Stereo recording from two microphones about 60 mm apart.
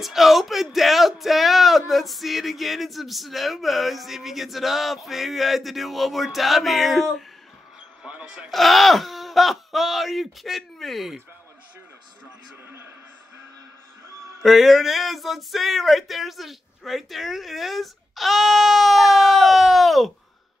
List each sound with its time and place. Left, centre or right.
0.0 s speech: centre
8.0 s speech: centre
8.5 s speech: centre
12.6 s a sound: right
14.4 s speech: centre